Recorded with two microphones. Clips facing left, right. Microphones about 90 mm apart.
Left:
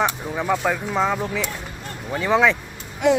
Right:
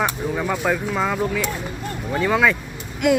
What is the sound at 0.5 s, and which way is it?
Speech, centre (ahead or behind).